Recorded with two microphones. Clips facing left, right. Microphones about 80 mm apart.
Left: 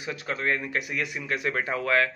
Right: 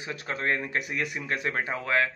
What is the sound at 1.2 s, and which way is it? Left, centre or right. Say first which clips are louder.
Speech: left 3 dB; right.